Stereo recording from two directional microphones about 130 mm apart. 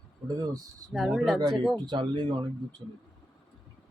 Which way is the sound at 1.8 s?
35° right (ahead or behind).